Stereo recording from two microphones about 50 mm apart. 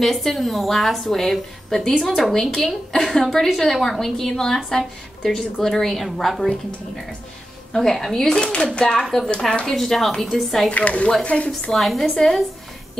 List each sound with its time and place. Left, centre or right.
0.0 s a woman's voice: centre
7.7 s a woman's voice: centre
8.4 s a woman's voice: centre
9.7 s speech: centre
10.7 s speech: left
11.7 s speech: centre